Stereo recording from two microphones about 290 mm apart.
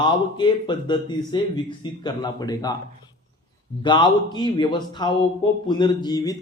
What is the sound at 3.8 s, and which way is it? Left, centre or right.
Speech, centre.